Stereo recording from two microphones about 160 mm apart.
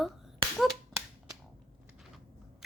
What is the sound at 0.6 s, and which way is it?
Finger snapping, centre (ahead or behind).